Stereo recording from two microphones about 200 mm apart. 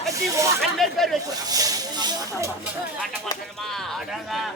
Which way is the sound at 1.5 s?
20° right (ahead or behind).